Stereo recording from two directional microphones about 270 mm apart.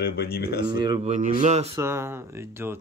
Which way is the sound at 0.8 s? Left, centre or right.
Centre.